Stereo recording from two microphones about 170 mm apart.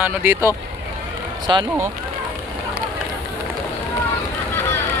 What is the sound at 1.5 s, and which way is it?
Speech, 25° right (ahead or behind).